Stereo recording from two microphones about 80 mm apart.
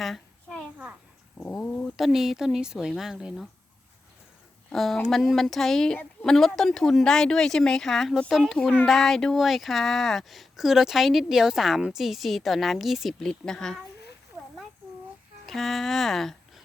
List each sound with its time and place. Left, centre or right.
0.0 s a sound: centre
1.6 s speech: left
2.0 s speech: centre
4.7 s speech: centre
13.1 s speech: centre
15.4 s speech: centre